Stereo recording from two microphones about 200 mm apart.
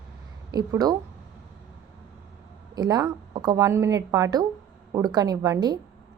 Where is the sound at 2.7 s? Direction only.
20° right (ahead or behind).